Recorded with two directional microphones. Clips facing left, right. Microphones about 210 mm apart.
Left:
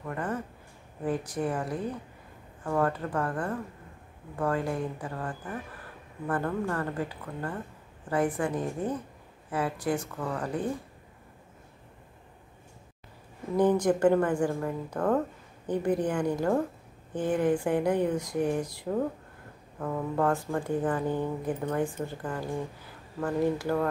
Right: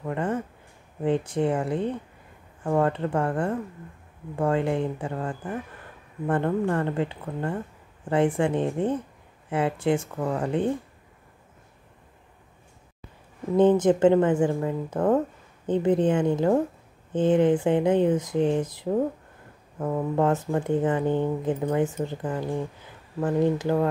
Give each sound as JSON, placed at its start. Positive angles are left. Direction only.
{"t": 0.0, "sound": "speech", "side_deg": -25}
{"t": 13.6, "sound": "speech", "side_deg": -25}